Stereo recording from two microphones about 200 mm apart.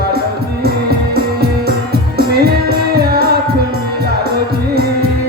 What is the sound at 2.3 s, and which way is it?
Music, 50° right (ahead or behind).